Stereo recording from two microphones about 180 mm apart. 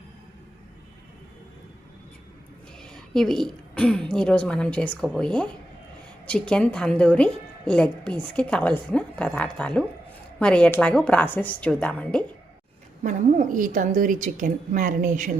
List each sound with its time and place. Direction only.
2.8 s a woman's voice: 5° left (ahead or behind)
13.0 s a woman's voice: 45° right (ahead or behind)